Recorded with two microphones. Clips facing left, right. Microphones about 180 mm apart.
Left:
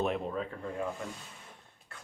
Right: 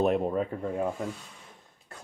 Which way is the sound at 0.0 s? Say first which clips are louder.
Right 7 dB; 45° right (ahead or behind).